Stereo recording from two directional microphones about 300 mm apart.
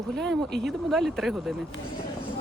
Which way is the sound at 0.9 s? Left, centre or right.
Centre.